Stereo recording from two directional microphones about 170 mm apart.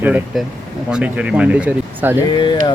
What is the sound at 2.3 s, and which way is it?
Speech, 25° left (ahead or behind).